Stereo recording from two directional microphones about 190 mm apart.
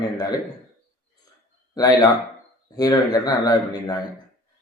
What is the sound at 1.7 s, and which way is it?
Speech, 20° left (ahead or behind).